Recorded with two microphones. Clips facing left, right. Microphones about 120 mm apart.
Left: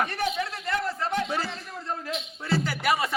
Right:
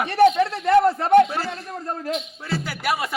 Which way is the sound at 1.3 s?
Centre (ahead or behind).